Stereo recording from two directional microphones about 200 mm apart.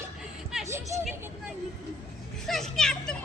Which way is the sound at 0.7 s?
15° right (ahead or behind).